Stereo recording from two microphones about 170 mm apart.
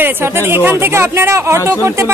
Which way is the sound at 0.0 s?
15° right (ahead or behind).